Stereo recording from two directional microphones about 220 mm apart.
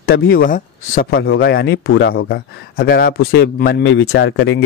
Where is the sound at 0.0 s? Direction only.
45° left (ahead or behind).